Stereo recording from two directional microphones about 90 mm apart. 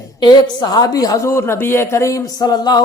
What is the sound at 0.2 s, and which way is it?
A man's voice, 50° left (ahead or behind).